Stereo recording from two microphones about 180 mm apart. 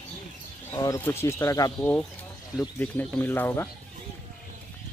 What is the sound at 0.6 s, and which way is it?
Speech, 20° left (ahead or behind).